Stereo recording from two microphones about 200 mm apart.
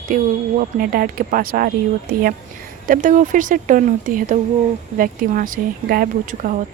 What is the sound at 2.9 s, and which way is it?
Speech, 40° right (ahead or behind).